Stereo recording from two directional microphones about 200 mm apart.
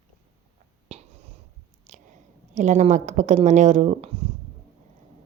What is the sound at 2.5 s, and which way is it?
Speech, 35° right (ahead or behind).